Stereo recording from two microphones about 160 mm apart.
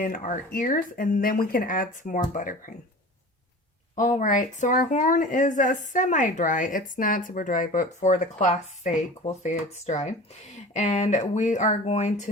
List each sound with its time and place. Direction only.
0.0 s speech: 55° left (ahead or behind)
3.9 s speech: 50° left (ahead or behind)